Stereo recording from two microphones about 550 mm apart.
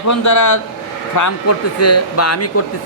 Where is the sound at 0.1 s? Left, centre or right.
Left.